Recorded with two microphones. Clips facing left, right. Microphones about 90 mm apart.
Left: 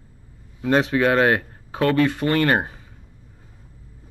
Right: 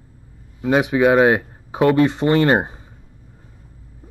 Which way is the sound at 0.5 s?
10° right (ahead or behind).